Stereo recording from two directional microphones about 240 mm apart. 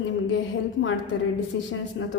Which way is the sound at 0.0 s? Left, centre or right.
Left.